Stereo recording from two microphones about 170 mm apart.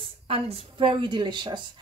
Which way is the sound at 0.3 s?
35° right (ahead or behind).